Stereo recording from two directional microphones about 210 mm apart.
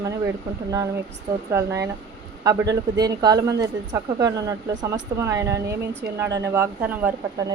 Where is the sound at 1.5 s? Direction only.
15° right (ahead or behind).